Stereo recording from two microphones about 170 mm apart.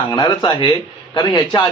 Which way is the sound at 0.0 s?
25° left (ahead or behind).